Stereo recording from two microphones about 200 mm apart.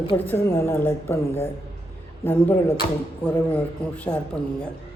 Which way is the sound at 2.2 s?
10° left (ahead or behind).